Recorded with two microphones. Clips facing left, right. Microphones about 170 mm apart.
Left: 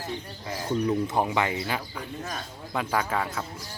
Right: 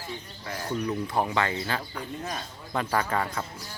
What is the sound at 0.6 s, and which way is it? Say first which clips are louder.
Speech: left 4 dB; 15° left (ahead or behind).